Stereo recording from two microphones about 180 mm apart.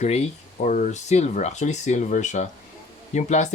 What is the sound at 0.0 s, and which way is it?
Speech, 40° left (ahead or behind).